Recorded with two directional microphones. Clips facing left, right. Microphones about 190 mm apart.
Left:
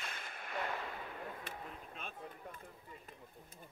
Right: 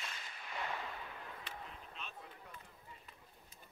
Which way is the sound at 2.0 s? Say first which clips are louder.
Left 2 dB; 50° left (ahead or behind).